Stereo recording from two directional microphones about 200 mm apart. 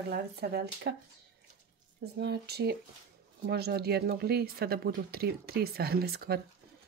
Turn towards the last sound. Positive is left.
turn(degrees=-50)  # may be behind; listen again after turning